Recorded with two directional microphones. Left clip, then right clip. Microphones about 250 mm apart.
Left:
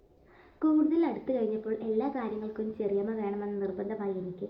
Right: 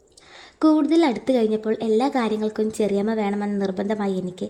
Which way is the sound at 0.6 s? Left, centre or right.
Right.